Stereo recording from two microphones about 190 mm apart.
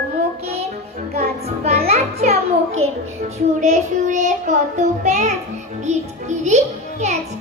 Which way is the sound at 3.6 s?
40° right (ahead or behind).